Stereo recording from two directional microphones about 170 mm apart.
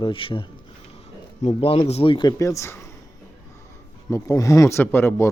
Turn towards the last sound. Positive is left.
turn(degrees=15)  # may be behind; listen again after turning